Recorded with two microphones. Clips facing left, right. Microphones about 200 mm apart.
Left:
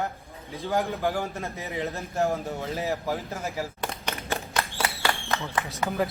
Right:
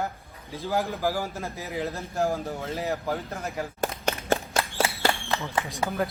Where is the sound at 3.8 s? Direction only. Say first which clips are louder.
Right 4 dB; 45° right (ahead or behind).